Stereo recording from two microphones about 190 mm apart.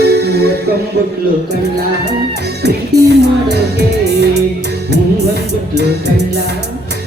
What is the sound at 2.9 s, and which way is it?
Music, 60° right (ahead or behind).